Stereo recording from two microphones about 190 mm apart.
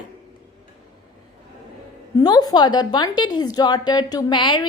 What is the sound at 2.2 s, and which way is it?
A woman's voice, 20° left (ahead or behind).